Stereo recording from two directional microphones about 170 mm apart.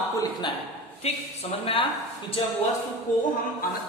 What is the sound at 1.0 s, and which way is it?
Speech, 40° left (ahead or behind).